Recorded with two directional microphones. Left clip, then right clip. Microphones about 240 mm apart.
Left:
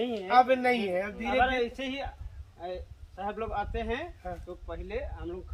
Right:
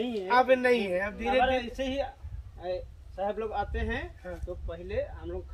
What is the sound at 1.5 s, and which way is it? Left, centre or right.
Speech, centre.